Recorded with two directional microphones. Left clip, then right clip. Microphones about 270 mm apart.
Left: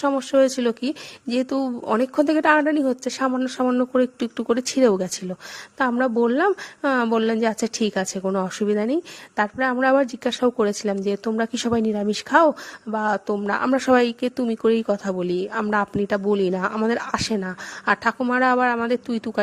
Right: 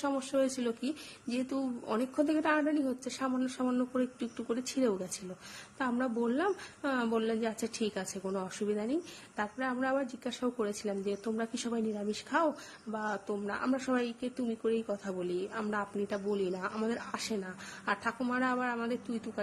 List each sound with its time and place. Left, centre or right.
0.0 s a woman's voice: left